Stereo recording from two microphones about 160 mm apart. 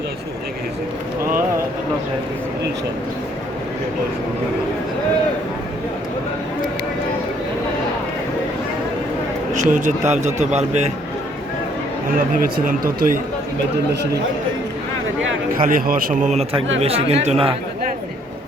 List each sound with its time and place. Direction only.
9.6 s speech: 50° right (ahead or behind)
12.0 s speech: 65° right (ahead or behind)
15.5 s speech: 60° right (ahead or behind); by 17.5 s 40° right (ahead or behind)